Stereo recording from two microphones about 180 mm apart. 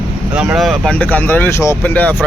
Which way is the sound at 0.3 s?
5° right (ahead or behind).